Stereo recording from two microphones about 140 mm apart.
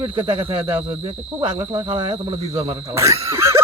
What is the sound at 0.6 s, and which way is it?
Speech, 10° right (ahead or behind).